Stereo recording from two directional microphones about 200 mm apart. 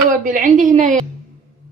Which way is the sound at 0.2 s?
40° right (ahead or behind).